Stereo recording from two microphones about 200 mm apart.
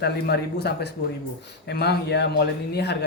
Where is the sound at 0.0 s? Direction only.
55° left (ahead or behind).